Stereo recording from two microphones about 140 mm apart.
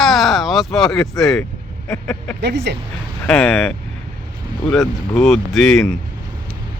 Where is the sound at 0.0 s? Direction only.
Centre (ahead or behind).